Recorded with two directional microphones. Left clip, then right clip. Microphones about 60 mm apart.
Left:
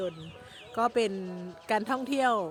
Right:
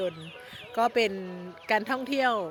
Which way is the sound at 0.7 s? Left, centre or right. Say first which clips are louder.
Right 2 dB; left.